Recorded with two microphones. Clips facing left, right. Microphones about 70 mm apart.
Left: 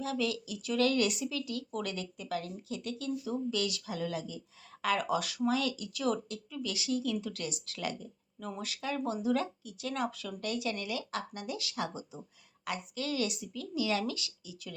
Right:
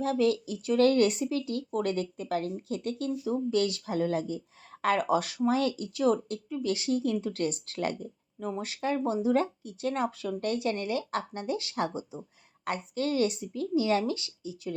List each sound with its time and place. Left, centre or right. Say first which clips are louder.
0.0 s speech: right 7 dB; right
8.4 s speech: right 6 dB; right